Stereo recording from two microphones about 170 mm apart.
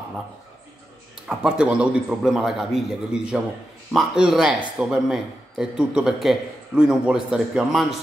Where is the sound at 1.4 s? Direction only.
5° right (ahead or behind).